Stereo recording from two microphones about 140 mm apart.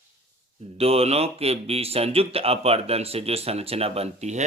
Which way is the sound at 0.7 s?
45° right (ahead or behind).